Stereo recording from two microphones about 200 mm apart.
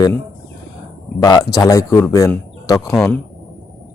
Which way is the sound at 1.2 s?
20° left (ahead or behind).